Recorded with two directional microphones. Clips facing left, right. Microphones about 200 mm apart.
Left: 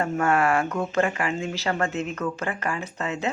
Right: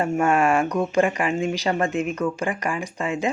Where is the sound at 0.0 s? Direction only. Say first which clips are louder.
Right 3 dB; 15° right (ahead or behind).